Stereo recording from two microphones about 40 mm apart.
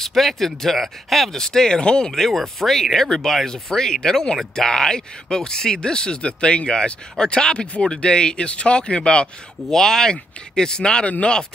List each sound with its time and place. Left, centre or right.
0.0 s speech: centre
1.3 s speech: centre
2.1 s speech: centre; by 9.3 s left
9.7 s speech: centre
11.1 s speech: left